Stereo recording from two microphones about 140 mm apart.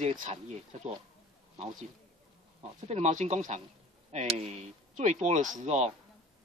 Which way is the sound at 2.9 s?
55° right (ahead or behind).